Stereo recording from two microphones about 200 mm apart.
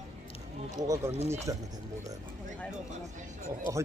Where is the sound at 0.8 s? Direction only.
15° right (ahead or behind).